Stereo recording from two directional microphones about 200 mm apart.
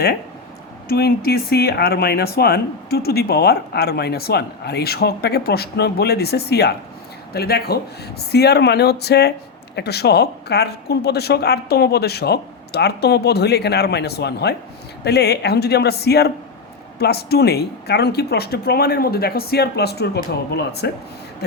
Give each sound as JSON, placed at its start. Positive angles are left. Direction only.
{"t": 0.9, "sound": "a woman's voice", "side_deg": 50}